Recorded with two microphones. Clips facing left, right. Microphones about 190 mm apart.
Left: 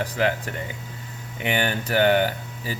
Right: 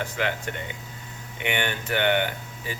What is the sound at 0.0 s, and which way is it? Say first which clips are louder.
Speech: left 4 dB; 35° left (ahead or behind).